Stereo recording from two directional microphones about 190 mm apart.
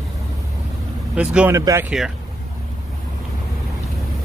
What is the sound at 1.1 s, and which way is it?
Speech, 5° right (ahead or behind).